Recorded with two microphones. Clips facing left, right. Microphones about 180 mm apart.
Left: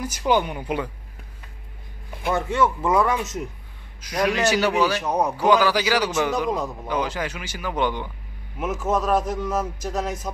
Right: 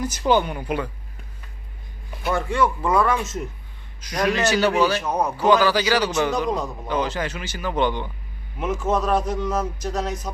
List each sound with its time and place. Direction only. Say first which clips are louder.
0.3 s a man's voice: right 1 dB; 15° left (ahead or behind)
2.2 s speech: even; 20° left (ahead or behind)
4.0 s a man's voice: even; 10° left (ahead or behind)